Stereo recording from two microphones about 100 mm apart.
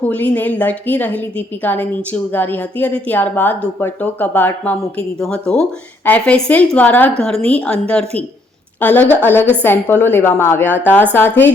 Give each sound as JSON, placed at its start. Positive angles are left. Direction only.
{"t": 0.0, "sound": "a woman's voice", "side_deg": 15}